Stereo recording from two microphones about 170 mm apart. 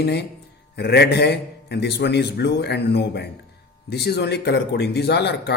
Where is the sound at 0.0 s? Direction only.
75° left (ahead or behind).